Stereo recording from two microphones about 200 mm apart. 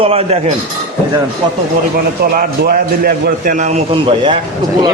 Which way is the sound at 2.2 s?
50° right (ahead or behind).